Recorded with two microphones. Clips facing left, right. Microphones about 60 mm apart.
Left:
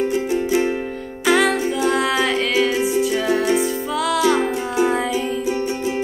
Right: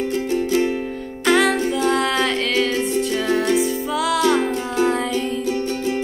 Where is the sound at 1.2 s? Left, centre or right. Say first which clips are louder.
Even; centre.